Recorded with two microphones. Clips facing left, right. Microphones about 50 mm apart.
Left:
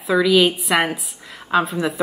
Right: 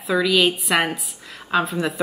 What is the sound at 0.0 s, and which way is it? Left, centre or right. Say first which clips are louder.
A woman's voice: left 3 dB; centre.